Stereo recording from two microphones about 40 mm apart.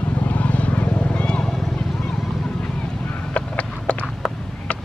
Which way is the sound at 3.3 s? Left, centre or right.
Left.